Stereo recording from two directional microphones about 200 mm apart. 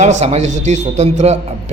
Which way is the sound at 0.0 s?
35° right (ahead or behind).